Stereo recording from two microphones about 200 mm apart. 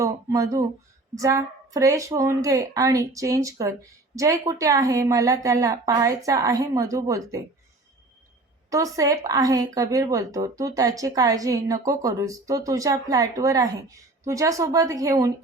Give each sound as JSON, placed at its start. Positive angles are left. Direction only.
{"t": 0.0, "sound": "a woman's voice", "side_deg": -15}
{"t": 8.7, "sound": "a woman's voice", "side_deg": -15}